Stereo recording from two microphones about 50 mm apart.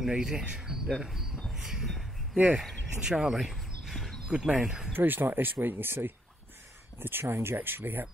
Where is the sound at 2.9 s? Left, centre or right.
Centre.